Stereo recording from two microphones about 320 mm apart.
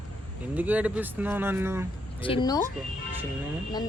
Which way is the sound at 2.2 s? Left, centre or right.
Centre.